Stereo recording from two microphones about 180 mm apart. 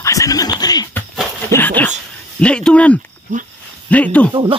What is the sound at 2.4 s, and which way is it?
Speech, 5° left (ahead or behind).